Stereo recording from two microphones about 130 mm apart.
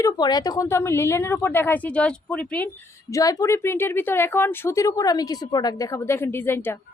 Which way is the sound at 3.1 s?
25° left (ahead or behind).